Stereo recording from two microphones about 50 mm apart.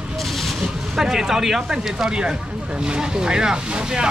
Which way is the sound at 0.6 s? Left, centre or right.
Centre.